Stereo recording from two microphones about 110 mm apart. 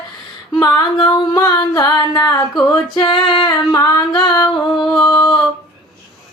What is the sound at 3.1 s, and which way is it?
Female singing, 55° left (ahead or behind).